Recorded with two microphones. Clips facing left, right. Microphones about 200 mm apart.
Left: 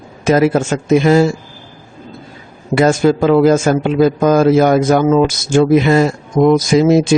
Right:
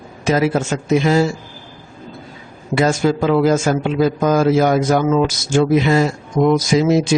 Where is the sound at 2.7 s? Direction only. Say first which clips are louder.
Left 4 dB; 55° left (ahead or behind).